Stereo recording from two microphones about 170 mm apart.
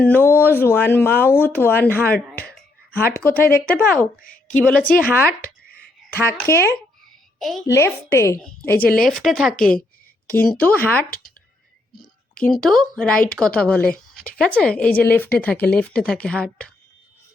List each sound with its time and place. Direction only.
0.0 s a woman's voice: 10° left (ahead or behind)
7.3 s a woman's voice: centre (ahead or behind)
7.6 s speech: 15° left (ahead or behind)
12.5 s speech: 5° left (ahead or behind)